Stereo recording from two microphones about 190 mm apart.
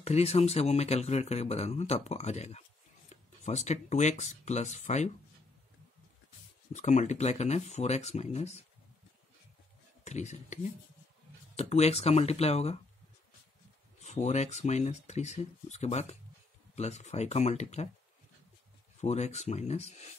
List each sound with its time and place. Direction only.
0.0 s speech: 35° left (ahead or behind)
6.7 s speech: 40° left (ahead or behind)
10.0 s speech: 35° left (ahead or behind)
14.0 s speech: 35° left (ahead or behind)
18.9 s speech: 35° left (ahead or behind)